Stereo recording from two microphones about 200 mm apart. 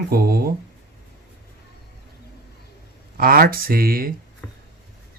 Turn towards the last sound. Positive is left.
turn(degrees=-45)  # may be behind; listen again after turning